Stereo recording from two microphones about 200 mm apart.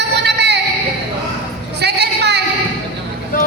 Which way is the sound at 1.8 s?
55° right (ahead or behind).